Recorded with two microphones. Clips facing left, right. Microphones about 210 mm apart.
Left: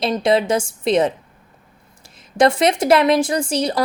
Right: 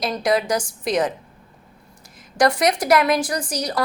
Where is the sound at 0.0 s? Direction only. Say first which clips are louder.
Left 4 dB; 25° left (ahead or behind).